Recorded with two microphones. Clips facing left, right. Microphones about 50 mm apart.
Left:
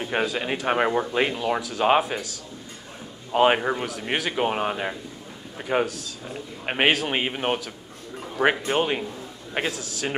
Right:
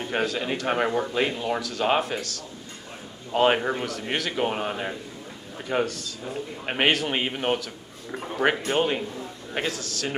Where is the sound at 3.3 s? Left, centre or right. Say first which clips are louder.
Left 2 dB; centre.